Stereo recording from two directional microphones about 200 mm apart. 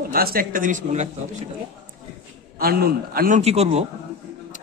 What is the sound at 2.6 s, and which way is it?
Speech, 50° right (ahead or behind).